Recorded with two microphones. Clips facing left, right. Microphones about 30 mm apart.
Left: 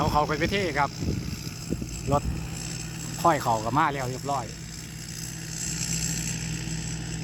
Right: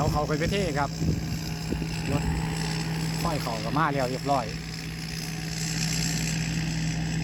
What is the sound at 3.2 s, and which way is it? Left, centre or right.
Speech, right.